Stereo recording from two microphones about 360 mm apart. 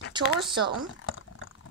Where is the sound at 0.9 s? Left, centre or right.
Left.